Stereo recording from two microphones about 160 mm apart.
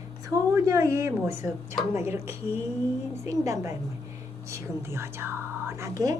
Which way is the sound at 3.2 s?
20° right (ahead or behind).